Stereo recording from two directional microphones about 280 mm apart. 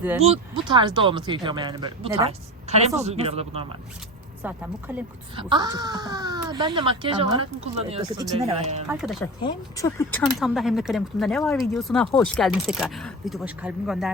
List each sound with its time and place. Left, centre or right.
0.2 s speech: right
4.4 s speech: centre
5.4 s speech: centre
8.9 s speech: centre
9.4 s speech: centre